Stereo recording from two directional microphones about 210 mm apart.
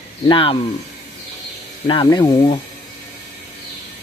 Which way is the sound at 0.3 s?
25° left (ahead or behind).